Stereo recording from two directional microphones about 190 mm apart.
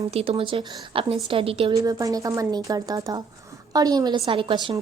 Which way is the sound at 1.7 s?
20° right (ahead or behind).